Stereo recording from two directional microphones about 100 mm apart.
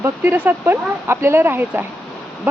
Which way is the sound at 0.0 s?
20° right (ahead or behind).